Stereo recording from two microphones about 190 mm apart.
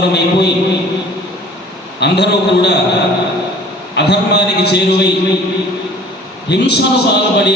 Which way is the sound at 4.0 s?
65° left (ahead or behind).